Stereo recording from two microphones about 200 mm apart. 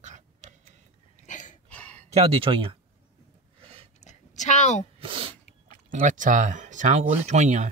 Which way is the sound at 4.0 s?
35° left (ahead or behind).